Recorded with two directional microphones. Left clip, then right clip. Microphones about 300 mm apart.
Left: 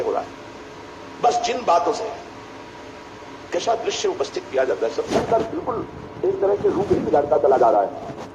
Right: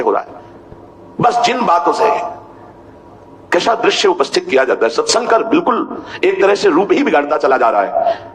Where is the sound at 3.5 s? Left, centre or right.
Right.